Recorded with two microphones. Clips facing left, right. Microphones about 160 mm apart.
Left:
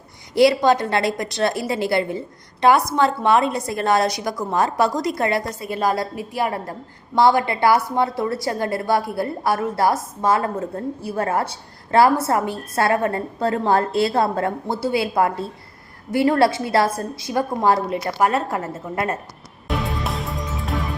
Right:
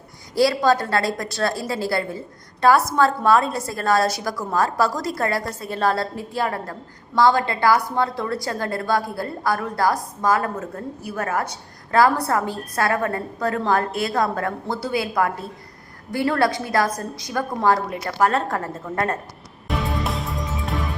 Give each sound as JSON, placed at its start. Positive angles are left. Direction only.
{"t": 0.3, "sound": "a woman's voice", "side_deg": 20}
{"t": 5.5, "sound": "a woman's voice", "side_deg": 10}
{"t": 18.3, "sound": "a woman's voice", "side_deg": 10}
{"t": 19.6, "sound": "music", "side_deg": 0}